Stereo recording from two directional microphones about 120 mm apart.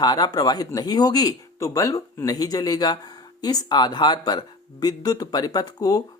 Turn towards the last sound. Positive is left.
turn(degrees=30)  # may be behind; listen again after turning